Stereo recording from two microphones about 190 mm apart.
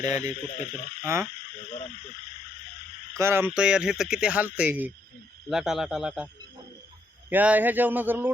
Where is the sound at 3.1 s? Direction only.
15° right (ahead or behind).